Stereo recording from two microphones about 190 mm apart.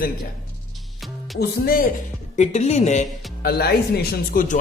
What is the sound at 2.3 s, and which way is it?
Speech, 35° left (ahead or behind).